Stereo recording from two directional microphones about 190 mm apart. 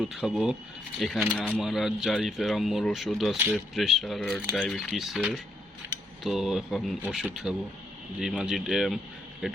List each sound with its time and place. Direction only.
0.0 s speech: 5° right (ahead or behind)